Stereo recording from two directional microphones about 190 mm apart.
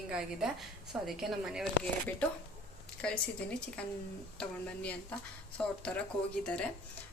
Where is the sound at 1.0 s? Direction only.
Centre (ahead or behind).